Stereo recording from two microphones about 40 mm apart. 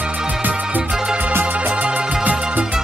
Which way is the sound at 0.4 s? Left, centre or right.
Right.